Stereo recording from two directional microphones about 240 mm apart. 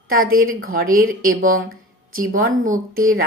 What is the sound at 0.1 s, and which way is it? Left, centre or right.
Speech, right.